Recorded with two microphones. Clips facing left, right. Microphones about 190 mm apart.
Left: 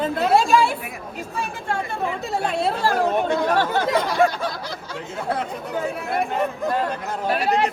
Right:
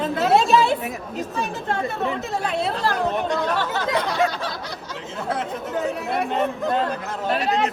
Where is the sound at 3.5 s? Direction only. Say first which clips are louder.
Left 3 dB; 50° left (ahead or behind).